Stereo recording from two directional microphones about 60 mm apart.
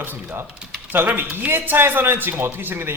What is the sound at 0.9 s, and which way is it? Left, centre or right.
A man's voice, right.